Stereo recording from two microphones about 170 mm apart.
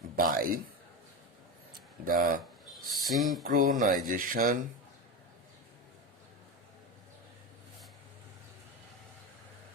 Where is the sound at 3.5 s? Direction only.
55° right (ahead or behind).